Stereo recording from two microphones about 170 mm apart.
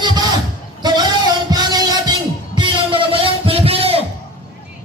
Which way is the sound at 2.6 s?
30° right (ahead or behind).